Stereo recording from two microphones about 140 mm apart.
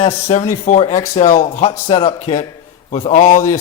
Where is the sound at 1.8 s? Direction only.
45° left (ahead or behind); by 3.6 s 65° left (ahead or behind).